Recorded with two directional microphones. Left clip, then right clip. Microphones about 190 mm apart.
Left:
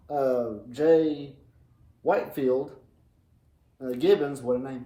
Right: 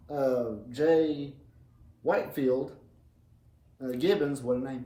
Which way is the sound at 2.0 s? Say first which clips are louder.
Left 3 dB; 25° left (ahead or behind).